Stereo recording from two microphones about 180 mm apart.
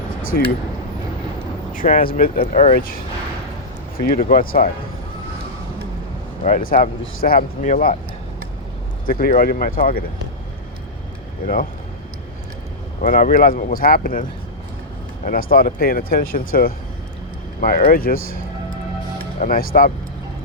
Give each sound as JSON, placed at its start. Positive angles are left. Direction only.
{"t": 0.2, "sound": "speech", "side_deg": 50}
{"t": 1.7, "sound": "speech", "side_deg": 50}
{"t": 6.4, "sound": "speech", "side_deg": 50}
{"t": 9.0, "sound": "speech", "side_deg": 50}
{"t": 13.0, "sound": "speech", "side_deg": 45}
{"t": 19.4, "sound": "speech", "side_deg": 50}